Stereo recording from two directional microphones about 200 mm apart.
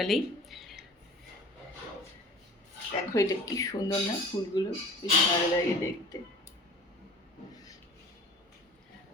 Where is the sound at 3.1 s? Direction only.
15° left (ahead or behind).